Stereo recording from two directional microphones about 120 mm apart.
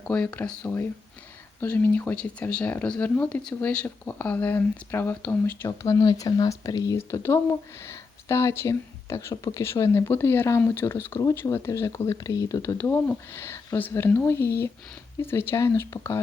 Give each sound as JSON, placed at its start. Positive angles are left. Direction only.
{"t": 0.0, "sound": "speech", "side_deg": 10}
{"t": 5.6, "sound": "speech", "side_deg": 25}